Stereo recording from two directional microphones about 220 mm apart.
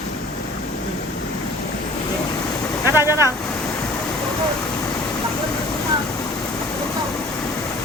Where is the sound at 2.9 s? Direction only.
10° right (ahead or behind).